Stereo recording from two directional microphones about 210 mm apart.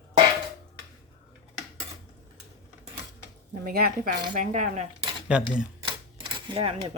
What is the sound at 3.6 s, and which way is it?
Speech, 45° right (ahead or behind).